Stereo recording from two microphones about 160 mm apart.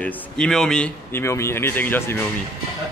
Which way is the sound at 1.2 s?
15° left (ahead or behind).